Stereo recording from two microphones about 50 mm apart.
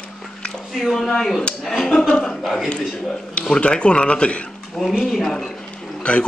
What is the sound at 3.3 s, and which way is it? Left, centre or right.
A man's voice, left.